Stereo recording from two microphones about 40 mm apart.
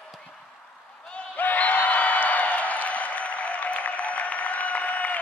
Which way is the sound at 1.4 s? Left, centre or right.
Left.